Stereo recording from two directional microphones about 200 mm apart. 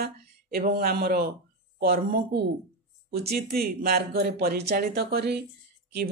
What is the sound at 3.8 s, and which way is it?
Speech, 50° right (ahead or behind).